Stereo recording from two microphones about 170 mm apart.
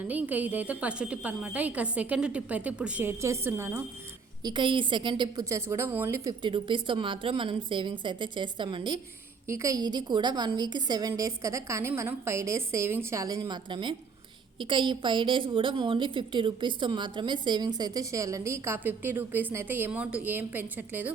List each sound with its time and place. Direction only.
0.0 s a woman's voice: 10° right (ahead or behind)
4.4 s a woman's voice: 30° right (ahead or behind)
6.4 s a woman's voice: 30° right (ahead or behind); by 21.1 s 10° right (ahead or behind)